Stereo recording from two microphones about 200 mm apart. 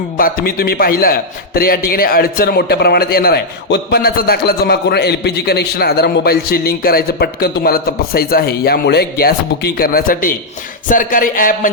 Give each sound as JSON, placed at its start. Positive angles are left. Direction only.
{"t": 0.2, "sound": "a man's voice", "side_deg": 45}